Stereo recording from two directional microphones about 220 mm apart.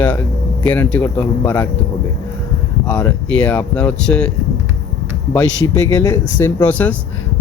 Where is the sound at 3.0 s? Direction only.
5° left (ahead or behind).